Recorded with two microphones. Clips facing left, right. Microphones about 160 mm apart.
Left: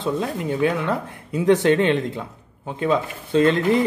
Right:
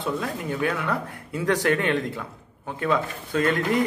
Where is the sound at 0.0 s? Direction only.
25° left (ahead or behind).